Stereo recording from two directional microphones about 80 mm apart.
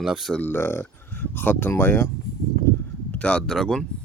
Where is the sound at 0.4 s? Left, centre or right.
Left.